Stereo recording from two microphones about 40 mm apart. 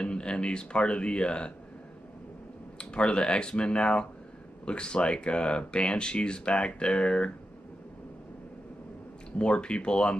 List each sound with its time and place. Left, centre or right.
0.0 s speech: left
2.8 s speech: left
9.4 s speech: left